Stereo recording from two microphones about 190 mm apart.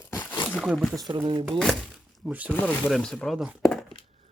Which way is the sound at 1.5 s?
5° left (ahead or behind).